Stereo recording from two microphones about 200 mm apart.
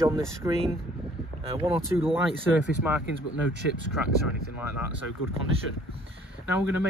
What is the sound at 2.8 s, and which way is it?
Speech, 10° right (ahead or behind).